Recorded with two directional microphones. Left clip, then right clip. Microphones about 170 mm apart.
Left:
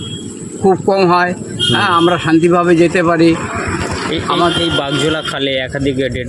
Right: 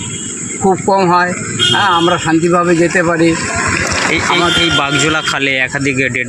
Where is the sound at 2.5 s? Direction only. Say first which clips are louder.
Right 1 dB; 10° left (ahead or behind).